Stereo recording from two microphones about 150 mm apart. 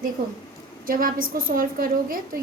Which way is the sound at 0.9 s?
70° right (ahead or behind).